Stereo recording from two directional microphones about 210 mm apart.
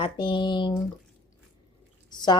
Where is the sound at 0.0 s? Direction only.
20° left (ahead or behind).